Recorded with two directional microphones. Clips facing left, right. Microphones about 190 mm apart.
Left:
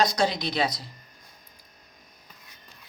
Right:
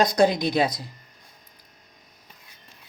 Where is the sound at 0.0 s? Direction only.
50° right (ahead or behind).